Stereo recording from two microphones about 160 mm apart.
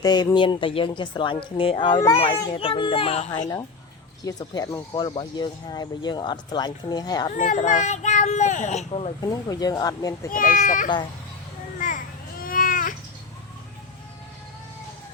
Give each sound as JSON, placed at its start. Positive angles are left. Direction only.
{"t": 0.0, "sound": "speech", "side_deg": 25}
{"t": 4.2, "sound": "speech", "side_deg": 25}
{"t": 7.3, "sound": "speech", "side_deg": 50}
{"t": 9.3, "sound": "speech", "side_deg": 25}
{"t": 10.3, "sound": "speech", "side_deg": 55}
{"t": 11.8, "sound": "a sound", "side_deg": 55}